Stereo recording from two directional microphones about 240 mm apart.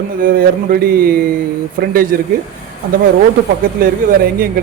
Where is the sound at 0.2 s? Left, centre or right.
Right.